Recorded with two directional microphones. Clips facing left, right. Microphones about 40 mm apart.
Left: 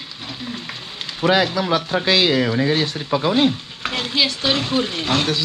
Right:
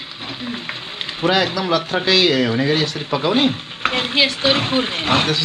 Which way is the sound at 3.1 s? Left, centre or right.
Right.